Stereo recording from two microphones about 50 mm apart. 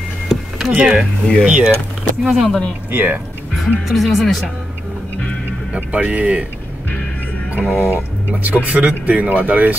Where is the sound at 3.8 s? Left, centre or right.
Centre.